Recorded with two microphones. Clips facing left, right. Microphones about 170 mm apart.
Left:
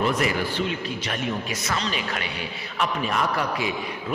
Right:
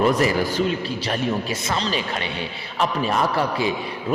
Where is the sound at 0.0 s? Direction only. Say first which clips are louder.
Right 5 dB; 35° right (ahead or behind).